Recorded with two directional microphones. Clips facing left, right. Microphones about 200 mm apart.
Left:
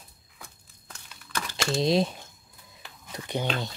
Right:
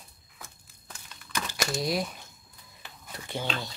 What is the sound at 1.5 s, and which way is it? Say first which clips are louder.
Speech: left 6 dB; 25° left (ahead or behind).